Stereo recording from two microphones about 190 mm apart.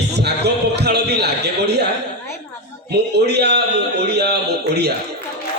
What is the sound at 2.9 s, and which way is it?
A man's voice, 60° right (ahead or behind).